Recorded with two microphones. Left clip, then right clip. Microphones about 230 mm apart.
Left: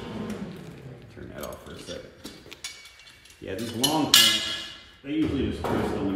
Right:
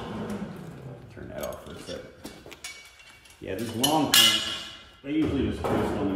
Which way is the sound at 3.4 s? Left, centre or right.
Centre.